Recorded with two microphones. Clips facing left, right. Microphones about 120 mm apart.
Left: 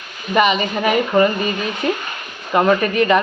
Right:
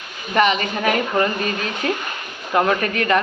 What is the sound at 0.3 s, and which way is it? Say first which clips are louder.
Speech: left 2 dB; 5° left (ahead or behind).